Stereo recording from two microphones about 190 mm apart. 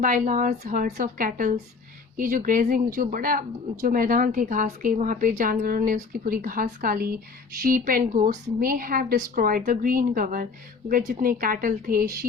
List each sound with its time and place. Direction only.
0.0 s speech: 40° right (ahead or behind)